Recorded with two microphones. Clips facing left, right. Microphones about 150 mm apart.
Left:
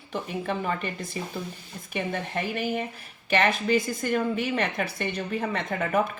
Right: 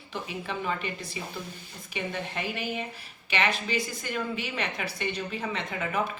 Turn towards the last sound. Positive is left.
turn(degrees=50)  # may be behind; listen again after turning